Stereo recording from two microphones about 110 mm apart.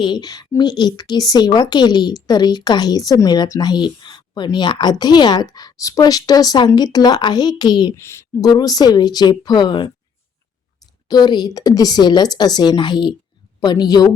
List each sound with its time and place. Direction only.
0.0 s a woman's voice: 40° left (ahead or behind)
7.9 s a woman's voice: 25° left (ahead or behind)
8.4 s a woman's voice: 35° left (ahead or behind)
11.1 s a woman's voice: 40° left (ahead or behind)